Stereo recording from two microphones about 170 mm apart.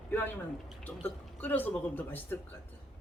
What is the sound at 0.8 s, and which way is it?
Speech, 10° left (ahead or behind).